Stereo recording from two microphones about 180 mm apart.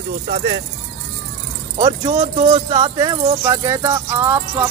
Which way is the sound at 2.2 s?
30° right (ahead or behind).